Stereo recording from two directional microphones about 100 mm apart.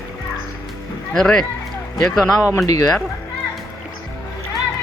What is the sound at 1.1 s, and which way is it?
Speech, 5° left (ahead or behind).